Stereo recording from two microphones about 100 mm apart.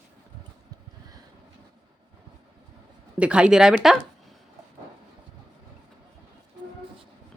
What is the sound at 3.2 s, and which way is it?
Speech, 10° right (ahead or behind).